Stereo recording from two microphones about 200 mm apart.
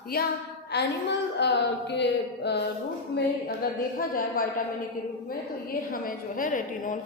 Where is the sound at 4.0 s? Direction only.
45° left (ahead or behind).